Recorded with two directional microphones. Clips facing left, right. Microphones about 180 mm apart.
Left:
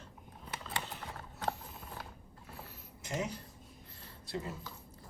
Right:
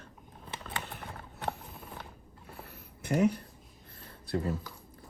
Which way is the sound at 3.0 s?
60° right (ahead or behind).